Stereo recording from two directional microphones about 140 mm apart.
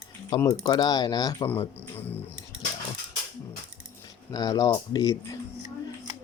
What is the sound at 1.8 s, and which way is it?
Speech, 15° left (ahead or behind).